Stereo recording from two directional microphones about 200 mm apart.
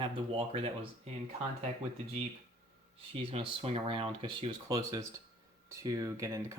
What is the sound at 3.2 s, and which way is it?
Speech, 30° right (ahead or behind).